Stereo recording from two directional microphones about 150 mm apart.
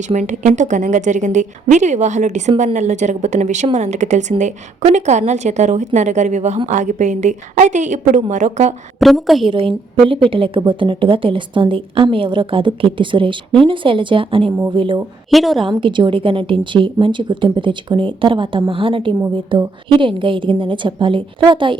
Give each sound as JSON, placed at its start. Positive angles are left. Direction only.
{"t": 0.1, "sound": "speech", "side_deg": -55}
{"t": 9.0, "sound": "a woman's voice", "side_deg": 0}
{"t": 9.5, "sound": "a woman's voice", "side_deg": -35}
{"t": 15.3, "sound": "a woman's voice", "side_deg": 0}
{"t": 15.8, "sound": "a woman's voice", "side_deg": -30}